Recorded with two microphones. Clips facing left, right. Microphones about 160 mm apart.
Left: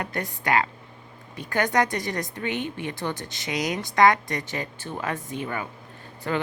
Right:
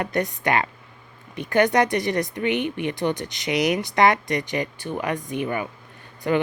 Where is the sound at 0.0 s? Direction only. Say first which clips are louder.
Right 6 dB; 20° right (ahead or behind).